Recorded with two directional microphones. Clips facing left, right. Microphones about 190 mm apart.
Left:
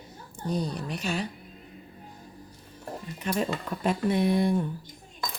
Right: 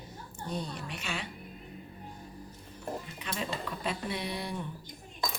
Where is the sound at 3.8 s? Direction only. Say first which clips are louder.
Left 12 dB; 50° left (ahead or behind).